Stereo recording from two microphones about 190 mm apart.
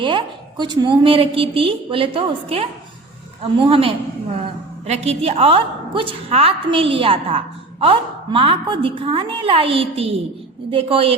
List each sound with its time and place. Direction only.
0.0 s a woman's voice: 25° right (ahead or behind)